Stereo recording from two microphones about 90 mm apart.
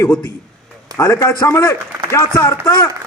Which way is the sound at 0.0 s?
25° left (ahead or behind).